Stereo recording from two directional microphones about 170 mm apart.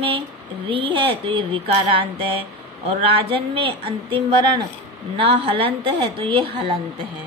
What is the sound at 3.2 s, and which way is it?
A woman's voice, 30° right (ahead or behind).